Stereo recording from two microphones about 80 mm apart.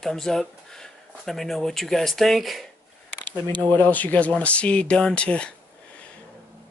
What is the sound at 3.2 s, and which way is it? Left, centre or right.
Speech, left.